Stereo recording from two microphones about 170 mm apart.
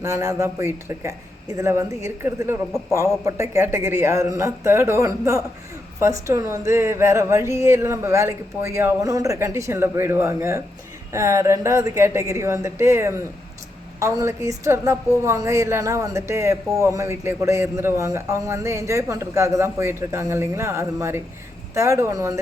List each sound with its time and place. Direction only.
0.0 s speech: 15° right (ahead or behind)